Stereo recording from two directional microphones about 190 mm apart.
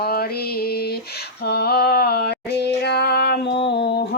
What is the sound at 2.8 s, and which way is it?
Female singing, 60° left (ahead or behind).